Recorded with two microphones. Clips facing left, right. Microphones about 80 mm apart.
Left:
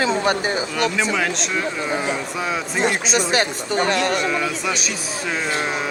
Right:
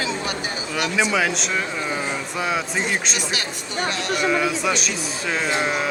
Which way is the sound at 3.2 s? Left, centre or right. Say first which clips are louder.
Left 8 dB; left.